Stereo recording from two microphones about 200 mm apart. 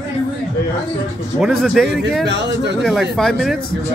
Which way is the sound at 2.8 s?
Centre (ahead or behind).